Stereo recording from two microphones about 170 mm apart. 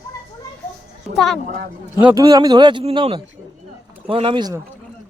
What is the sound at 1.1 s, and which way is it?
Speech, centre (ahead or behind).